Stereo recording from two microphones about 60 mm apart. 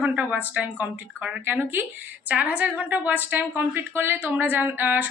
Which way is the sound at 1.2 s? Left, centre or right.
Centre.